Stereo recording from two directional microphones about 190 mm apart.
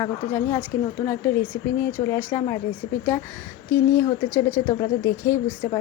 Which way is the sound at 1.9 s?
15° left (ahead or behind).